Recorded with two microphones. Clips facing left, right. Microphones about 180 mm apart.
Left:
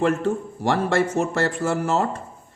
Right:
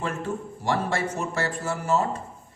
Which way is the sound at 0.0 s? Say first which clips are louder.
Left 8 dB; 75° left (ahead or behind).